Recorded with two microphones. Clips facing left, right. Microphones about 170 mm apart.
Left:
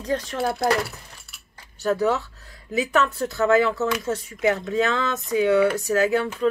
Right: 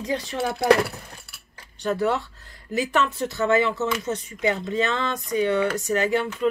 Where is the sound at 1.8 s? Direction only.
5° left (ahead or behind).